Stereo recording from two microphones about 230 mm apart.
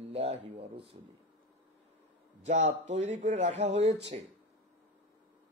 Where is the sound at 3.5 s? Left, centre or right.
Right.